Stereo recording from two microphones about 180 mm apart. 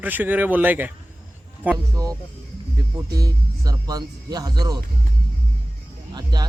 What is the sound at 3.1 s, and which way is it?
Speech, 20° right (ahead or behind).